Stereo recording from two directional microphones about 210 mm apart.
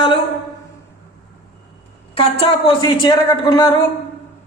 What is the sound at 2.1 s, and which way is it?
Speech, 25° left (ahead or behind).